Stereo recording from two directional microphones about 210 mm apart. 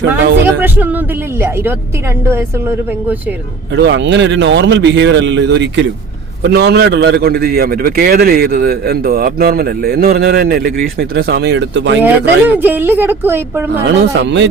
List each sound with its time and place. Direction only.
0.6 s a woman's voice: 10° right (ahead or behind)
2.3 s a woman's voice: 10° right (ahead or behind)
3.8 s a man's voice: 55° right (ahead or behind)
12.5 s a woman's voice: 10° right (ahead or behind)
13.8 s a man's voice: 55° right (ahead or behind)